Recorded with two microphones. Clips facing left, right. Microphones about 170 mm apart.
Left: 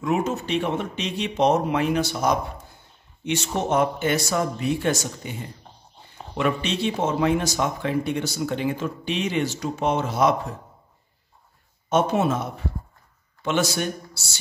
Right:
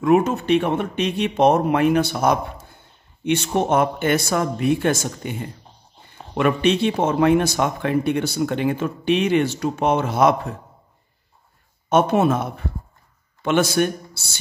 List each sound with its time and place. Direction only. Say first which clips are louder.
0.0 s speech: right 7 dB; 55° right (ahead or behind)
6.3 s speech: right 6 dB; 55° right (ahead or behind)
11.9 s speech: right 4 dB; 60° right (ahead or behind)